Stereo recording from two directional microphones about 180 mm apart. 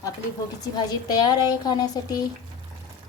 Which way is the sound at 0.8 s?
25° left (ahead or behind).